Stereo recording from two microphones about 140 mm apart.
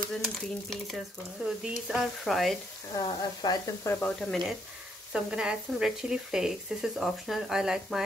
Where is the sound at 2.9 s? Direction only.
30° left (ahead or behind).